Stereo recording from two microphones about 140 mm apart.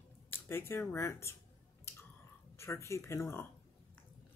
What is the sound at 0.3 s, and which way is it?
Speech, 15° left (ahead or behind).